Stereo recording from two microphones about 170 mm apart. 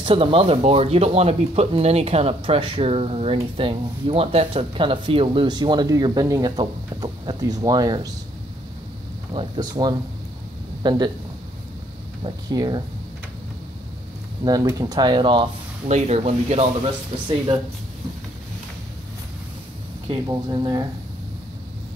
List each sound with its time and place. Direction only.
0.0 s speech: 30° right (ahead or behind)
9.3 s a man's voice: 30° right (ahead or behind)
12.2 s speech: 25° right (ahead or behind)
14.4 s speech: 20° right (ahead or behind)
15.9 s speech: 40° right (ahead or behind)
20.2 s speech: 25° right (ahead or behind)